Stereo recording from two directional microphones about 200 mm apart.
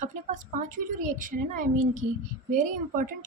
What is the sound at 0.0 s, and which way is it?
A woman's voice, 40° right (ahead or behind).